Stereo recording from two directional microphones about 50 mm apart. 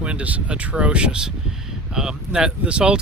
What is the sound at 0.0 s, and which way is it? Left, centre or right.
Speech, right.